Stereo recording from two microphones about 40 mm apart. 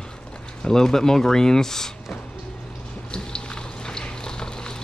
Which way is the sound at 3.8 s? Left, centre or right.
Centre.